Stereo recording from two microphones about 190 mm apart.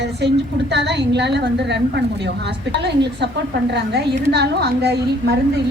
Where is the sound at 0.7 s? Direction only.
65° right (ahead or behind).